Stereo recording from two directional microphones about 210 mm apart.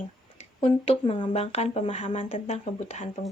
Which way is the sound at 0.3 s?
25° left (ahead or behind).